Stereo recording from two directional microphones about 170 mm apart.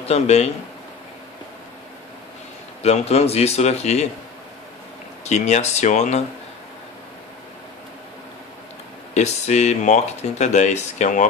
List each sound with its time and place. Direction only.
0.0 s speech: 40° left (ahead or behind)
2.8 s speech: 40° left (ahead or behind)
5.2 s speech: 40° left (ahead or behind)
9.1 s speech: 40° left (ahead or behind)